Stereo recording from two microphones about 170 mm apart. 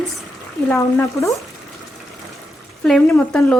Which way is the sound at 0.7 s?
15° left (ahead or behind).